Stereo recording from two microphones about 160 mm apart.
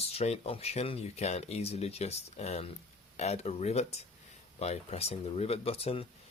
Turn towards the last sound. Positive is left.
turn(degrees=35)  # may be behind; listen again after turning